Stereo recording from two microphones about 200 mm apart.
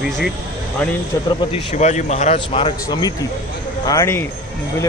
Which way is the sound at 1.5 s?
35° left (ahead or behind).